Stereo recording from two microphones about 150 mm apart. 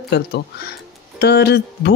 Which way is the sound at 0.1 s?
90° left.